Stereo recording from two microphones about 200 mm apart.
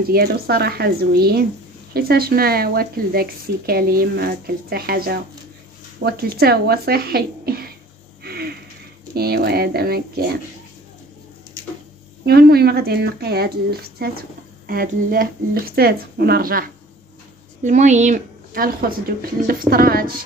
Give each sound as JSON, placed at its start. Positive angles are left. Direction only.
{"t": 0.1, "sound": "speech", "side_deg": -50}
{"t": 8.2, "sound": "a sound", "side_deg": -50}
{"t": 9.1, "sound": "speech", "side_deg": -50}
{"t": 12.3, "sound": "speech", "side_deg": -50}
{"t": 17.6, "sound": "speech", "side_deg": -35}